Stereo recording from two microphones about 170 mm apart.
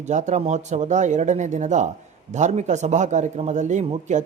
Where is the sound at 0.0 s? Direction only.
45° right (ahead or behind).